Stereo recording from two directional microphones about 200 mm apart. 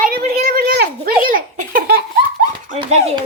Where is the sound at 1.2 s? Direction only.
45° right (ahead or behind).